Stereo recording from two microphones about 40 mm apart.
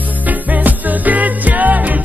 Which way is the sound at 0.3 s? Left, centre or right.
Right.